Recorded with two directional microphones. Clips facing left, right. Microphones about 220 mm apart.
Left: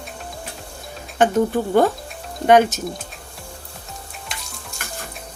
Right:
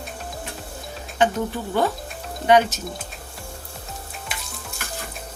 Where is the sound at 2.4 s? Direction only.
50° left (ahead or behind).